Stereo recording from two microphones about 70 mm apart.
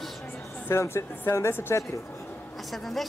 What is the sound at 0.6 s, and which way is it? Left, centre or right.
Speech, left.